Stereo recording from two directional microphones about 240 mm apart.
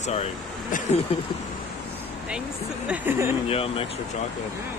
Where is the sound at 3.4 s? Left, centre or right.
Left.